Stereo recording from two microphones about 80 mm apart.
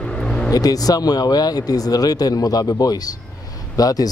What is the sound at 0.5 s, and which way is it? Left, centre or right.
Speech, left.